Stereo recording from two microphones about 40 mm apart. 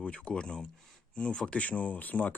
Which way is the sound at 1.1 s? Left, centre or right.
Left.